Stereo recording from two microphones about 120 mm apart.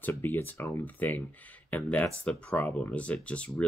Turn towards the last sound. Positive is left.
turn(degrees=10)  # may be behind; listen again after turning